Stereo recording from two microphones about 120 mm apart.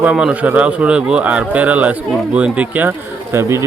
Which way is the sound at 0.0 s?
10° right (ahead or behind).